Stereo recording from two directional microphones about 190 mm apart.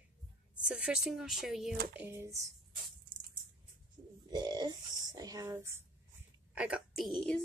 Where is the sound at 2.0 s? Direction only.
15° right (ahead or behind).